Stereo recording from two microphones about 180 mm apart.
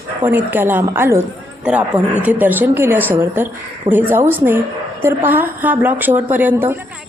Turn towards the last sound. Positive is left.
turn(degrees=-10)  # may be behind; listen again after turning